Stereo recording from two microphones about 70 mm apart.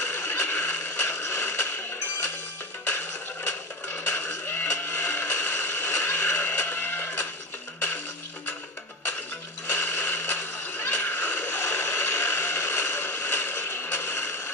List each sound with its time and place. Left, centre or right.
0.0 s neigh: left
3.4 s a sound: left
9.7 s neigh: left